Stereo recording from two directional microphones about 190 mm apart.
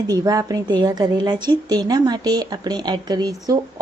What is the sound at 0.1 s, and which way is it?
A woman's voice, 20° right (ahead or behind).